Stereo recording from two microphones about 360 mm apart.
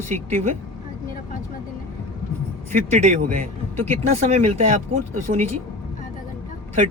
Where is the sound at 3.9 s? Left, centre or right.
Centre.